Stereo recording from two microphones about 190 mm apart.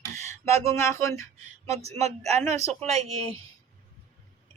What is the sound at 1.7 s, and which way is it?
Speech, 35° right (ahead or behind).